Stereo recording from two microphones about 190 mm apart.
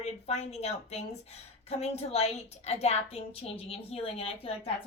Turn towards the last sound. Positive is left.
turn(degrees=30)  # may be behind; listen again after turning